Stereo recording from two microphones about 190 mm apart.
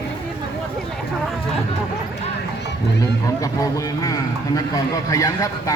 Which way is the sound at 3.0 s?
15° left (ahead or behind).